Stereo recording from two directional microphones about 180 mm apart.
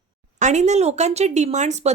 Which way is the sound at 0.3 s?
40° right (ahead or behind).